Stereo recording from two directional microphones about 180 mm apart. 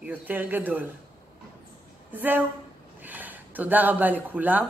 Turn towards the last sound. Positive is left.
turn(degrees=-10)  # may be behind; listen again after turning